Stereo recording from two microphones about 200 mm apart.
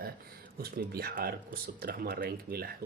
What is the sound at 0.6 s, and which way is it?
Speech, 50° right (ahead or behind).